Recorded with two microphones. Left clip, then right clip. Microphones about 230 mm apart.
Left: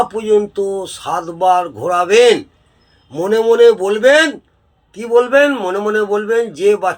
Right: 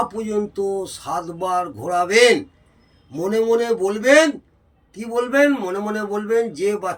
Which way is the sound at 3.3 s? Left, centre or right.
Centre.